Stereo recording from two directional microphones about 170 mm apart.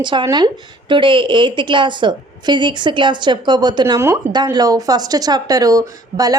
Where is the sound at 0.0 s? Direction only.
25° right (ahead or behind).